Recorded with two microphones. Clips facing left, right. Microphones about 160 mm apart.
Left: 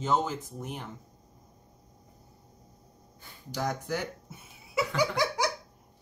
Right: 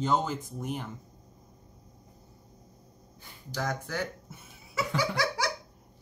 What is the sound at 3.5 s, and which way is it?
Speech, 15° left (ahead or behind).